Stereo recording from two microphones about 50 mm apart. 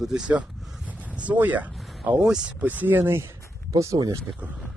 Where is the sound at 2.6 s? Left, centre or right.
Right.